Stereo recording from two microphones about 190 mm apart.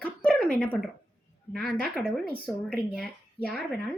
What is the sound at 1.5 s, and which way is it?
A woman's voice, centre (ahead or behind).